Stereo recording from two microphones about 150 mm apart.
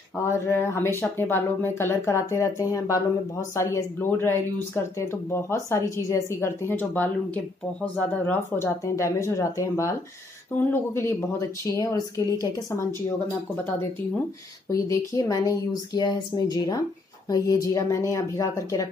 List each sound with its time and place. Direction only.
0.2 s speech: 15° left (ahead or behind)
14.7 s speech: 20° left (ahead or behind)